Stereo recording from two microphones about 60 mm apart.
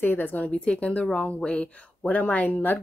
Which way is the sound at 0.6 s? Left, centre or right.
Centre.